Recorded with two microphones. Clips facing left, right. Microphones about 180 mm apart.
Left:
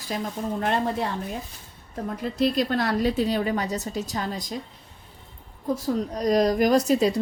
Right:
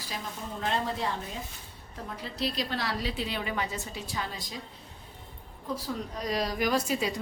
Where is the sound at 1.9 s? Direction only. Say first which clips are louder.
Left 10 dB; 50° left (ahead or behind).